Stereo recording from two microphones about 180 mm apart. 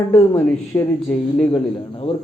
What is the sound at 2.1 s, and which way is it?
Speech, 35° left (ahead or behind).